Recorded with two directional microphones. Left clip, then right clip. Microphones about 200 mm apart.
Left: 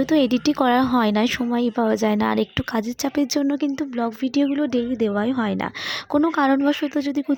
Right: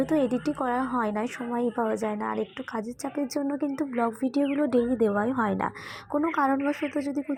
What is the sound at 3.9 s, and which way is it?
A woman's voice, 30° left (ahead or behind).